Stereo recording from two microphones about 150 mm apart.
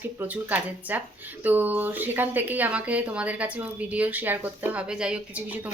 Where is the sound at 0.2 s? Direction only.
10° right (ahead or behind).